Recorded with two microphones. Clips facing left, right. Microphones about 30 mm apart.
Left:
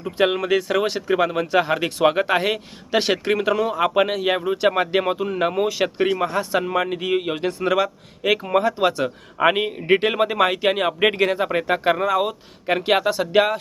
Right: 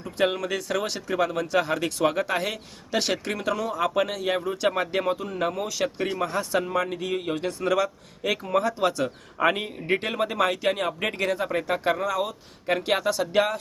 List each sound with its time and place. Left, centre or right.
0.2 s speech: left